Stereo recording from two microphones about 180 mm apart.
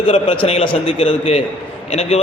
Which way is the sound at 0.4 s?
30° left (ahead or behind).